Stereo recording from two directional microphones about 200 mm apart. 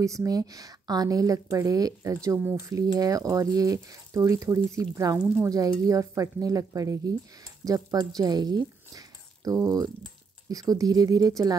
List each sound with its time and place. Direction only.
0.0 s a woman's voice: 15° right (ahead or behind)